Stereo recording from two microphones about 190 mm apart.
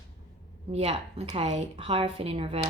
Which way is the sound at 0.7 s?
30° right (ahead or behind).